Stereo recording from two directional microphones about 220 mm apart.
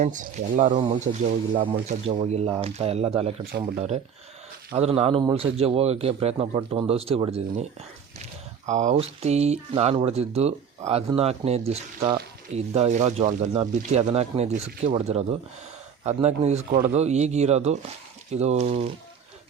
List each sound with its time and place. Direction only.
0.0 s speech: 35° right (ahead or behind)
2.0 s speech: 30° right (ahead or behind)